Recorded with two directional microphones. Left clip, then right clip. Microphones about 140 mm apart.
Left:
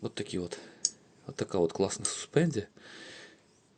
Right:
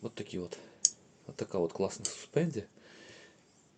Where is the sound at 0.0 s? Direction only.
50° left (ahead or behind).